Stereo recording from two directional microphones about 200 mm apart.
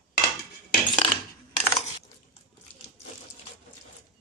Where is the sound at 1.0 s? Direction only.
25° left (ahead or behind).